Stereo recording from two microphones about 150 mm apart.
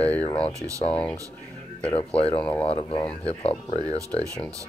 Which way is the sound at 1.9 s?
40° left (ahead or behind).